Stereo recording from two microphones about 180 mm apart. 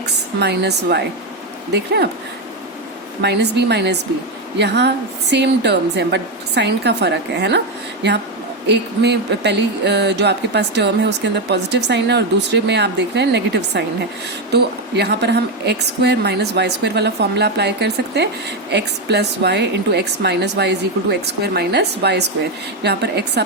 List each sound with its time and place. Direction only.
0.3 s speech: 70° right (ahead or behind)
3.2 s speech: 70° right (ahead or behind)
8.7 s speech: 70° right (ahead or behind)